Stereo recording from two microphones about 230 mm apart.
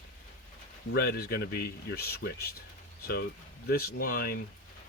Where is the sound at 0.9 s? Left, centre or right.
Left.